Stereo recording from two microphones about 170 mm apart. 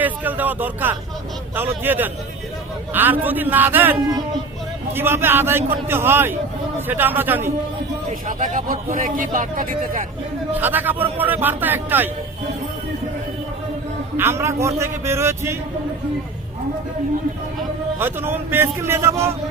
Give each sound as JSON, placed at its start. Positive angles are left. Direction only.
{"t": 0.0, "sound": "a man's voice", "side_deg": -10}
{"t": 8.3, "sound": "speech", "side_deg": -50}
{"t": 10.5, "sound": "a man's voice", "side_deg": -10}
{"t": 14.2, "sound": "a man's voice", "side_deg": -15}
{"t": 18.0, "sound": "a man's voice", "side_deg": -15}